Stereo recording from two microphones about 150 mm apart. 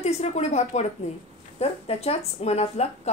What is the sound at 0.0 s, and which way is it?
A woman's voice, 50° left (ahead or behind).